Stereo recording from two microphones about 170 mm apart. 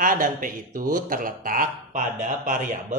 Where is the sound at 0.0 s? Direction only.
55° right (ahead or behind).